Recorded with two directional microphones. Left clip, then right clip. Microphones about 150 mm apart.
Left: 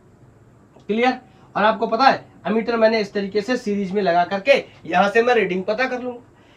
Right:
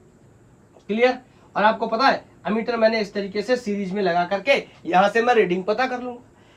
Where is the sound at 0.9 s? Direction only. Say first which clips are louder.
Even; centre (ahead or behind); by 6.0 s 20° right (ahead or behind).